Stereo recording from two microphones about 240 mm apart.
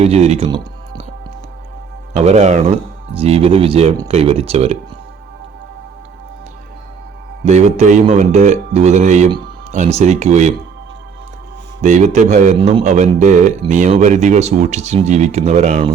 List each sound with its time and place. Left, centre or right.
0.0 s speech: right
2.1 s a man's voice: right
7.4 s a man's voice: right
11.8 s a man's voice: right